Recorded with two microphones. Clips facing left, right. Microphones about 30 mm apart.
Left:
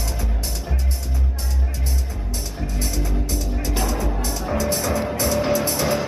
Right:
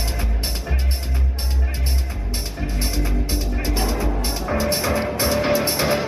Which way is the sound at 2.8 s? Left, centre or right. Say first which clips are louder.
Right 1 dB; right.